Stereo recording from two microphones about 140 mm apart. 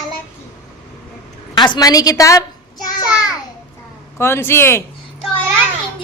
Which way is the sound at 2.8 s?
25° left (ahead or behind).